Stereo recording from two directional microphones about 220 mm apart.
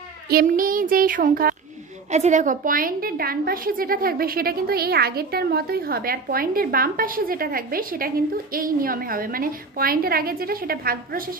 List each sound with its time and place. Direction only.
0.3 s a woman's voice: 40° right (ahead or behind)